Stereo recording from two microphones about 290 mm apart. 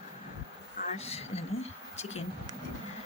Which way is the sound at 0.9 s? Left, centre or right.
Left.